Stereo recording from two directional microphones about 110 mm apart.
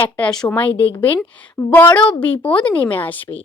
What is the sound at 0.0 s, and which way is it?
A woman's voice, 10° left (ahead or behind).